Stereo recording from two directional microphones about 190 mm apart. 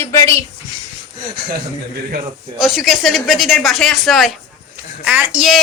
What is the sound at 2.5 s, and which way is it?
Speech, centre (ahead or behind).